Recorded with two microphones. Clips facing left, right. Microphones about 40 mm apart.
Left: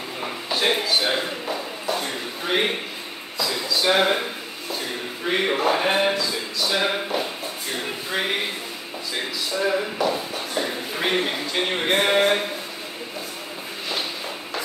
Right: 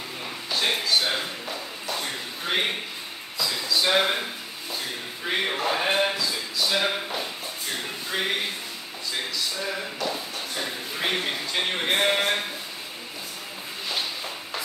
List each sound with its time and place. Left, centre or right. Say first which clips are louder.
0.2 s a sound: left 4 dB; centre
3.6 s speech: left 3 dB; centre
9.6 s speech: left 7 dB; centre